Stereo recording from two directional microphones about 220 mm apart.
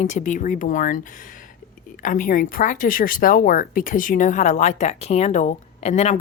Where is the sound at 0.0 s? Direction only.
35° left (ahead or behind).